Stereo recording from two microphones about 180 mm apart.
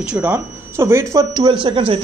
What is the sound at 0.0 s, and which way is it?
Speech, 5° right (ahead or behind).